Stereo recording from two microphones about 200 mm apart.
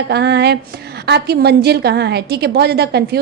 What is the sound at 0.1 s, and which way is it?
A woman's voice, 55° right (ahead or behind).